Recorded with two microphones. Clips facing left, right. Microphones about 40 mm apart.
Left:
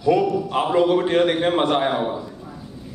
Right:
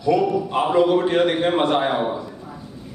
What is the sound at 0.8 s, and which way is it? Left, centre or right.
Speech, centre.